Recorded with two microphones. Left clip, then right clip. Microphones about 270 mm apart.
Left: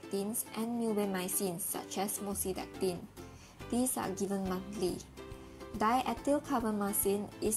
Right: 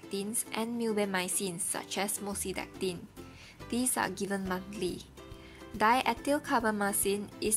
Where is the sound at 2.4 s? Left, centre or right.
Centre.